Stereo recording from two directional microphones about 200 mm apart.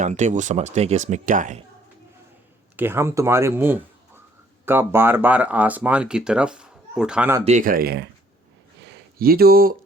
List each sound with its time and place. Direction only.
0.0 s speech: 40° right (ahead or behind)
2.7 s speech: 10° right (ahead or behind)
7.4 s speech: 40° right (ahead or behind)
8.8 s a sound: 55° right (ahead or behind)